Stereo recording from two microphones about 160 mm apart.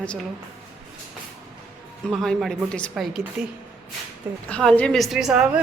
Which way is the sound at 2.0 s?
Centre (ahead or behind).